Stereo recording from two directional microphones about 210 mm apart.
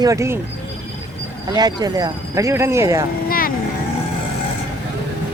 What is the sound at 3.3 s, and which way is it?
Vehicle, 40° left (ahead or behind).